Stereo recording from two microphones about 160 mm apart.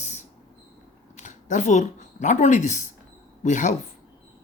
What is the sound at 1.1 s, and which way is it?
Speech, 50° left (ahead or behind).